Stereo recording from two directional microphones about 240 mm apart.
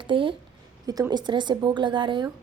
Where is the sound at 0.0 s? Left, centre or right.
Right.